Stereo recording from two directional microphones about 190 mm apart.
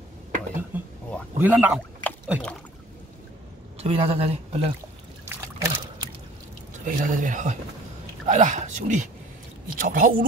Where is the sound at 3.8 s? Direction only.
30° right (ahead or behind).